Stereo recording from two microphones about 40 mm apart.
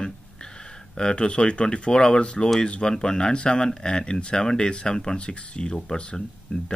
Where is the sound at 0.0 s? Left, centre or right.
Left.